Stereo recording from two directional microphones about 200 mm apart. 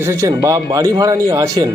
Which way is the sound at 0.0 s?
15° right (ahead or behind).